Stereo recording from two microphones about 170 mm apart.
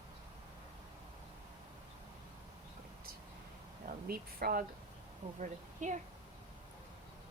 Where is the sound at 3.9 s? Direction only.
60° right (ahead or behind).